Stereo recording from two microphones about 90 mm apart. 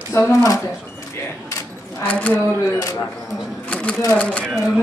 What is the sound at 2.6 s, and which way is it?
Speech, 35° left (ahead or behind).